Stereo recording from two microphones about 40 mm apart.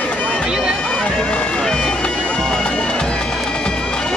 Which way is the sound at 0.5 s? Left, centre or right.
Right.